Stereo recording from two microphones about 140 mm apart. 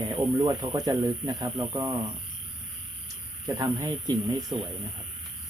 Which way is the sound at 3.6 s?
25° right (ahead or behind).